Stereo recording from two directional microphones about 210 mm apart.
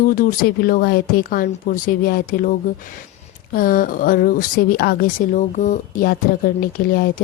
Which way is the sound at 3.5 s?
40° left (ahead or behind).